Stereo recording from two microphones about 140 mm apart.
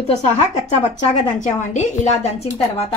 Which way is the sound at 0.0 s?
50° left (ahead or behind).